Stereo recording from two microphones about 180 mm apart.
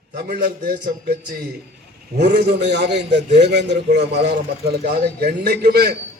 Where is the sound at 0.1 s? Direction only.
65° right (ahead or behind).